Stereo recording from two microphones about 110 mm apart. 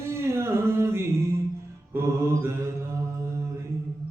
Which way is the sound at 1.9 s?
25° right (ahead or behind).